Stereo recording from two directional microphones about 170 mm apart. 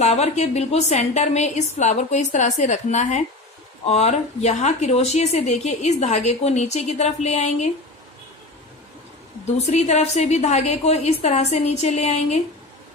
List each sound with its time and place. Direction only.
0.0 s a woman's voice: 40° left (ahead or behind)
9.6 s speech: 45° left (ahead or behind)